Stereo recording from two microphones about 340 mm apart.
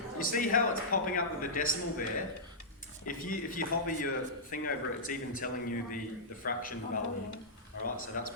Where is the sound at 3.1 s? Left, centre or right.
Left.